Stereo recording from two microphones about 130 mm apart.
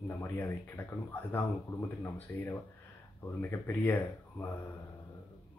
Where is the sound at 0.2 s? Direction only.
20° left (ahead or behind).